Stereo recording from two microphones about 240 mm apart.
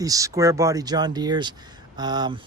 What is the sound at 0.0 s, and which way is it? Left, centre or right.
Speech, centre.